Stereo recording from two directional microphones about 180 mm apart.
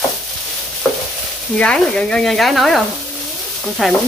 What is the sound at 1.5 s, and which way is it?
Frying, 5° left (ahead or behind).